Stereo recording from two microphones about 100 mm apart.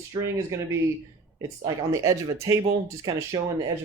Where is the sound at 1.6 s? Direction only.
35° right (ahead or behind).